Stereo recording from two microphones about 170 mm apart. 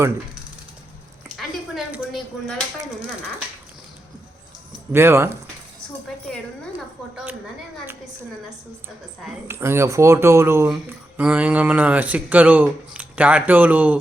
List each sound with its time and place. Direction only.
1.3 s a sound: centre (ahead or behind)
4.9 s speech: 15° right (ahead or behind)
9.5 s speech: 15° right (ahead or behind)